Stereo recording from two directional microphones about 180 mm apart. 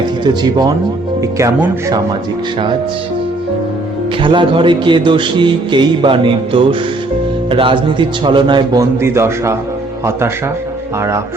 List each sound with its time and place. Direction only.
1.4 s speech: 15° right (ahead or behind)
4.2 s speech: 25° right (ahead or behind)